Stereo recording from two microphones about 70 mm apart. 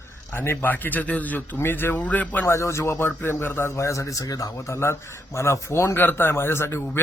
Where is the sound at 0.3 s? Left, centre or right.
Left.